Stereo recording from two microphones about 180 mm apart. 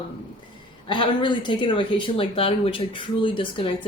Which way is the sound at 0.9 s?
25° left (ahead or behind).